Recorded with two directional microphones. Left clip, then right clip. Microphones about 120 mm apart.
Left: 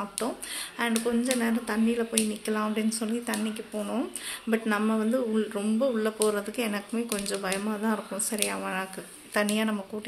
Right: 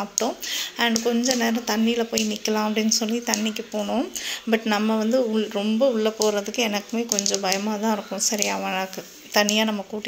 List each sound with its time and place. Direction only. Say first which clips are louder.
0.2 s speech: right 10 dB; 25° right (ahead or behind)